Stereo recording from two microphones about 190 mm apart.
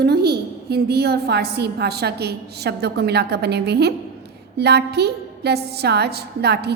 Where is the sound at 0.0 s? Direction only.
60° right (ahead or behind).